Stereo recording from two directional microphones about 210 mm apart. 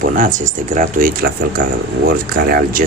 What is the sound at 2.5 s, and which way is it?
Speech, 45° right (ahead or behind).